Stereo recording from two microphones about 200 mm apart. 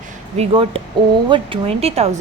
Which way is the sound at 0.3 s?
30° right (ahead or behind).